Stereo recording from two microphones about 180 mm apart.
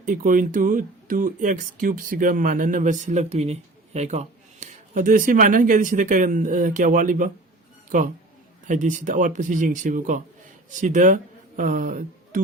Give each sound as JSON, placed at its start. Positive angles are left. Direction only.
{"t": 0.0, "sound": "speech", "side_deg": -45}